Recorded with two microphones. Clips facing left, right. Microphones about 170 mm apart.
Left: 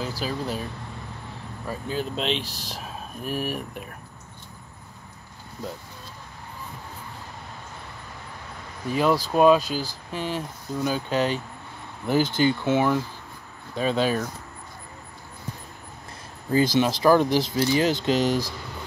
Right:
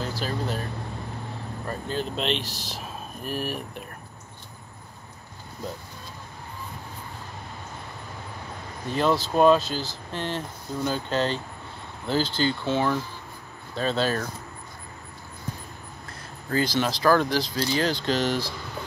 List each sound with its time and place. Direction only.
0.2 s speech: 5° left (ahead or behind)
1.7 s speech: 5° left (ahead or behind)
8.8 s speech: 10° left (ahead or behind)
16.4 s speech: 15° left (ahead or behind)
18.0 s speech: 5° left (ahead or behind)